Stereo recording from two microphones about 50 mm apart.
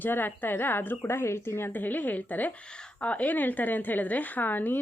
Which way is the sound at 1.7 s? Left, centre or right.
Left.